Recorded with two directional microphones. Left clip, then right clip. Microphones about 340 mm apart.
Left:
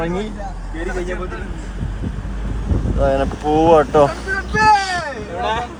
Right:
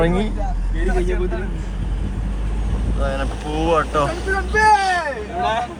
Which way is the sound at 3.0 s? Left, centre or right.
Left.